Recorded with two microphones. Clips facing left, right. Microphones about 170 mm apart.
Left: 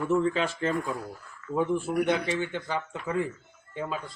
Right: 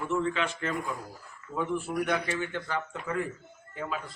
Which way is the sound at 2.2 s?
20° left (ahead or behind).